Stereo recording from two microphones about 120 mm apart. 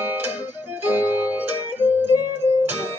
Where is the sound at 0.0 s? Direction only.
15° right (ahead or behind).